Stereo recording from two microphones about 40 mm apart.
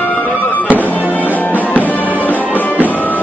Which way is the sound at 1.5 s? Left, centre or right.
Left.